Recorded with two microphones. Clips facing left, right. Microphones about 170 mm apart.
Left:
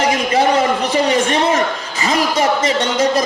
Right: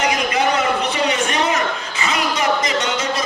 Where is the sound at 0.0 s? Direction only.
30° left (ahead or behind).